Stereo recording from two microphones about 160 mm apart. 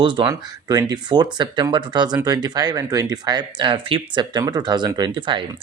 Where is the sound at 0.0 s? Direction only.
30° right (ahead or behind).